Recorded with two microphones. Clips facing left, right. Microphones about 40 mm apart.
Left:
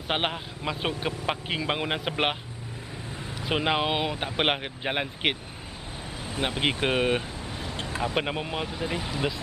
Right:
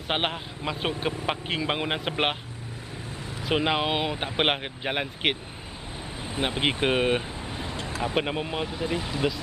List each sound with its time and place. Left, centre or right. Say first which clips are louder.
0.1 s a man's voice: even; centre
3.4 s a man's voice: right 1 dB; centre
6.2 s a man's voice: right 1 dB; centre